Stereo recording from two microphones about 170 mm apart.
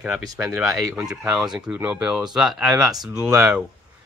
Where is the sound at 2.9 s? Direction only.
25° right (ahead or behind).